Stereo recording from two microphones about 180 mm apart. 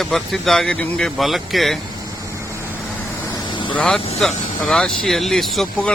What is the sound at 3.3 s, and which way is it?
Vehicle, 25° left (ahead or behind).